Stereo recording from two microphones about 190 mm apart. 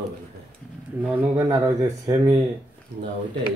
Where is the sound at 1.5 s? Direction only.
15° right (ahead or behind).